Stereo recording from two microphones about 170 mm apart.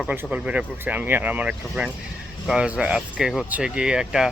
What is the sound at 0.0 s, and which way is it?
Speech, 10° right (ahead or behind).